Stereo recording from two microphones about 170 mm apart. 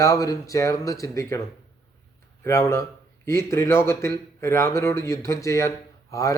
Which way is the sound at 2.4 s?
15° left (ahead or behind).